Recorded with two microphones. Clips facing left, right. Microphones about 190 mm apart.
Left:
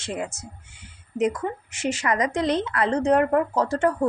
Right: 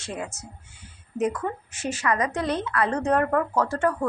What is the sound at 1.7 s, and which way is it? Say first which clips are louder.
Speech: left 4 dB; 90° left.